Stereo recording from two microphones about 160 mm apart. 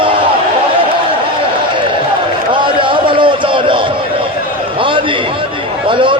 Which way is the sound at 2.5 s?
30° right (ahead or behind).